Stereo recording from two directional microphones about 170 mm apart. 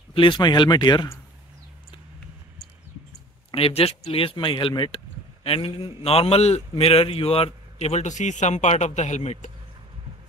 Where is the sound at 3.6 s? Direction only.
35° left (ahead or behind).